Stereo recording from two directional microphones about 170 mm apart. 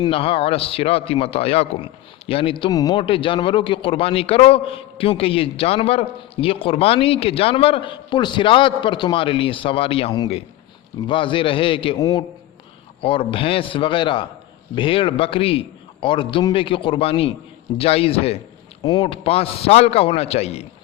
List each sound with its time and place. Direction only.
0.0 s a man's voice: 30° left (ahead or behind)
11.9 s a man's voice: 20° left (ahead or behind)
13.0 s a man's voice: 30° left (ahead or behind)